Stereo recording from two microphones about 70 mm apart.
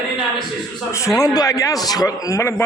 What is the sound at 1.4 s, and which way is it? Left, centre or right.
A man's voice, left.